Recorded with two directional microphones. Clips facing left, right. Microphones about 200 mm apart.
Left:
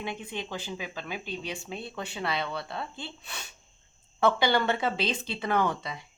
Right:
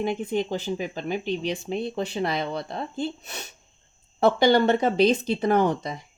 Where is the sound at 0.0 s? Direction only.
45° right (ahead or behind).